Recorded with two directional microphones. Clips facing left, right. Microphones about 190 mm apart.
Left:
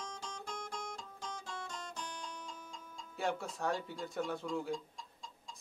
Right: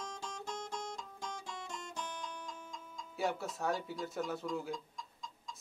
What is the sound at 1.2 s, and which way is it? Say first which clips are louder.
Music: left 1 dB; 20° right (ahead or behind).